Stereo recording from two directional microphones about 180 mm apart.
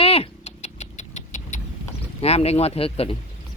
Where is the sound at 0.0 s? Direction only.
35° left (ahead or behind).